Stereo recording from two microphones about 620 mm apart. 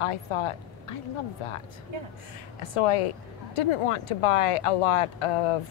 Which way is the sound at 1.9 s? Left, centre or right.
Right.